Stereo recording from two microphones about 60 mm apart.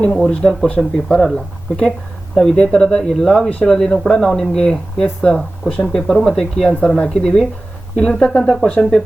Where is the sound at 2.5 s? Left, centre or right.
Centre.